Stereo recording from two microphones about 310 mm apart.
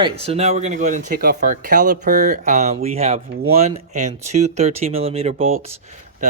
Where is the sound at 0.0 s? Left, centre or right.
Centre.